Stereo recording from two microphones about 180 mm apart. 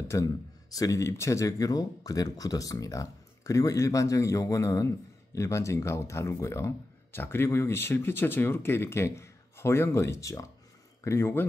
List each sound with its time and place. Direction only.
0.1 s speech: 15° left (ahead or behind)